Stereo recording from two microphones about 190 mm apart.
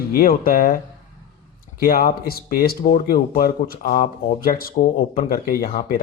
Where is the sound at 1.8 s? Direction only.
50° left (ahead or behind).